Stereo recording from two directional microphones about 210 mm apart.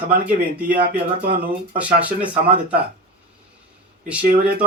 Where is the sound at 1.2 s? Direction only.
40° right (ahead or behind).